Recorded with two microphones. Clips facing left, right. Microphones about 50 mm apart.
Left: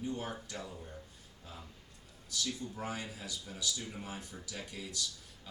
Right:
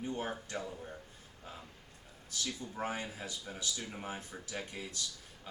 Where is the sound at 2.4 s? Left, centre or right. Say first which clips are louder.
Right 1 dB; right.